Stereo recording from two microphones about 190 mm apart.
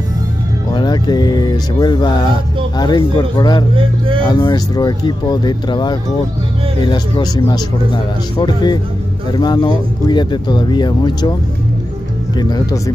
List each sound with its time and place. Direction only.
0.7 s speech: 25° left (ahead or behind)
12.4 s speech: 20° left (ahead or behind)